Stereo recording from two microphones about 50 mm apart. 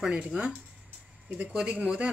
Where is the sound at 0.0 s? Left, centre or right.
Centre.